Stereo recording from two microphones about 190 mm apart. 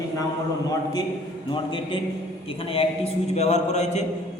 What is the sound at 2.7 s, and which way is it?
Speech, 35° left (ahead or behind).